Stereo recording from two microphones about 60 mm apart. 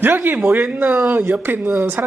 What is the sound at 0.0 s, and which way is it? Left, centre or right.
Speech, right.